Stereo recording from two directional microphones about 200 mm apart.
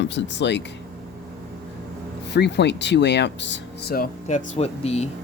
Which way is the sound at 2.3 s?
60° left (ahead or behind).